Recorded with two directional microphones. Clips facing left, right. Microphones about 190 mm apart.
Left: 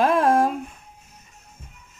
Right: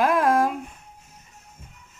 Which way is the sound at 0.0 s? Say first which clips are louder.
Left 2 dB; 25° left (ahead or behind).